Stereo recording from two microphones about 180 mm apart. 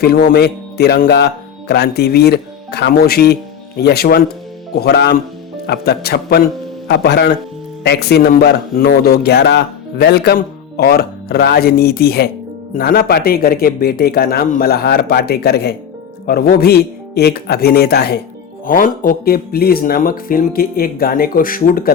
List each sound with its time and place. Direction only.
0.0 s speech: 60° left (ahead or behind)
18.6 s speech: 50° left (ahead or behind)